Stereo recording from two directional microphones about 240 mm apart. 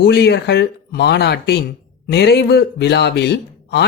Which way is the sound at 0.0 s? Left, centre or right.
Left.